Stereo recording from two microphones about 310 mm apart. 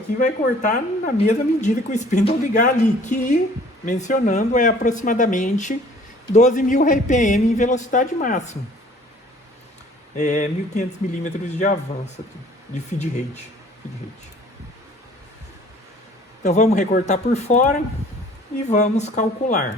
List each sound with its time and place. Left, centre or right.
0.2 s a woman's voice: left
10.2 s a woman's voice: left
16.4 s a woman's voice: left